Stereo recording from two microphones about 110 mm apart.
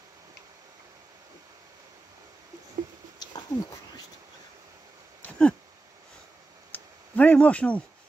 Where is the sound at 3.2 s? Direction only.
40° left (ahead or behind).